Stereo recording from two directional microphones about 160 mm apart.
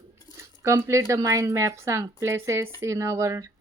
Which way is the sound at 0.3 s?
20° right (ahead or behind).